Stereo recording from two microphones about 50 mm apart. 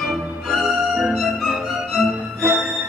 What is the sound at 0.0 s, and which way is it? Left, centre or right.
Music, centre.